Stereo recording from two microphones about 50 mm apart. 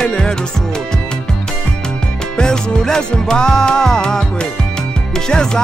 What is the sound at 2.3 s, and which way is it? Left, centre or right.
Music, centre.